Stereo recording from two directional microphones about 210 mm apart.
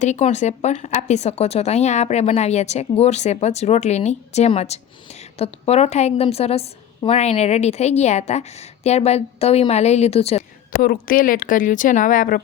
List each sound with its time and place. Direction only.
0.0 s a woman's voice: 35° left (ahead or behind)
10.8 s a woman's voice: 40° left (ahead or behind)